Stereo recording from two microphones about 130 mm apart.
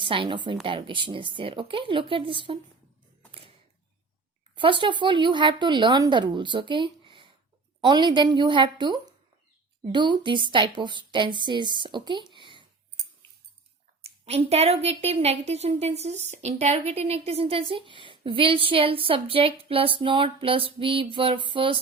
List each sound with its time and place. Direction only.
0.0 s speech: 40° right (ahead or behind)
4.5 s speech: 40° right (ahead or behind)
12.3 s a sound: 40° right (ahead or behind)
14.0 s a woman's voice: 50° right (ahead or behind)